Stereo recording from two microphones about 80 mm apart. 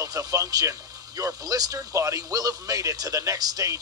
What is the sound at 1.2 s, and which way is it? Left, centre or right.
A man's voice, right.